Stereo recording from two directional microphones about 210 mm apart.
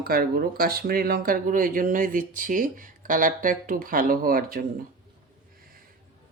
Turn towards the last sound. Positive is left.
turn(degrees=-45)  # may be behind; listen again after turning